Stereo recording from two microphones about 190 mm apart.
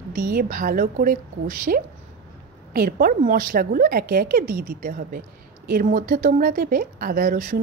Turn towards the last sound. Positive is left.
turn(degrees=-45)  # may be behind; listen again after turning